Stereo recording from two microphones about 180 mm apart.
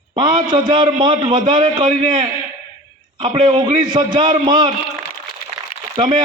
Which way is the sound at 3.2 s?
25° right (ahead or behind).